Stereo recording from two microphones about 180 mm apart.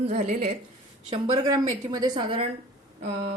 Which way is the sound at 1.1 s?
25° right (ahead or behind).